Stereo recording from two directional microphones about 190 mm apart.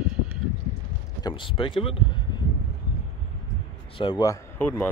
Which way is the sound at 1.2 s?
25° left (ahead or behind).